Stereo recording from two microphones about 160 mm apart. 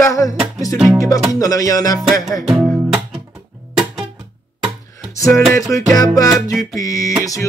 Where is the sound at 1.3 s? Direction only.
20° left (ahead or behind).